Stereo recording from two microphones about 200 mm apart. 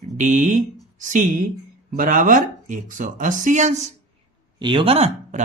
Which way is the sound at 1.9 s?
45° right (ahead or behind).